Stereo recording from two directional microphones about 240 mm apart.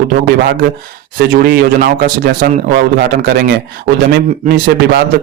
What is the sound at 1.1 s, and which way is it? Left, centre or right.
A man's voice, right.